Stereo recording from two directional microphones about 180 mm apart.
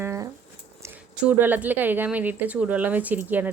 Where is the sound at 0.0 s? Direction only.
15° right (ahead or behind).